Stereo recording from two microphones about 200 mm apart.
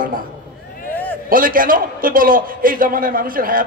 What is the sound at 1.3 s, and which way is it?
A man's voice, 45° right (ahead or behind).